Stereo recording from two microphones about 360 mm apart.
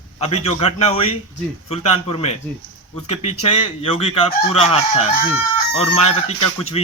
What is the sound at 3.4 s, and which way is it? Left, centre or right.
A man's voice, centre.